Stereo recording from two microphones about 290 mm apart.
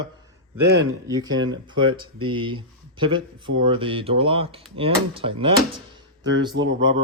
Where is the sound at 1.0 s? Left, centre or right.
Centre.